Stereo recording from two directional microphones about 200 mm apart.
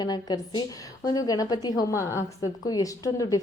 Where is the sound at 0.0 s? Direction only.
20° left (ahead or behind).